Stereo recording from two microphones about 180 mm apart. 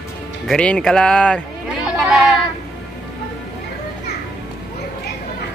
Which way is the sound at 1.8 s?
5° right (ahead or behind).